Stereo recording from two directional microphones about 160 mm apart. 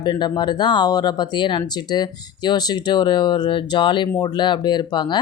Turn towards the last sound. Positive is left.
turn(degrees=30)  # may be behind; listen again after turning